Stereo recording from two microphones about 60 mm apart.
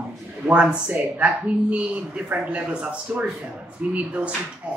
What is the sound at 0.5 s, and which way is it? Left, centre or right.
A man's voice, right.